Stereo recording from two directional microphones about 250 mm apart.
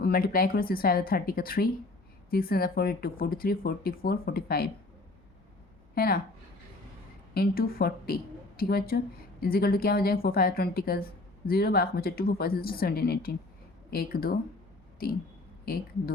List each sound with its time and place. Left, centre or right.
0.0 s speech: left
5.9 s speech: left
7.3 s a woman's voice: left